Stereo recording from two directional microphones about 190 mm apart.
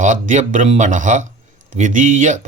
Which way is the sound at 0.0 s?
40° right (ahead or behind).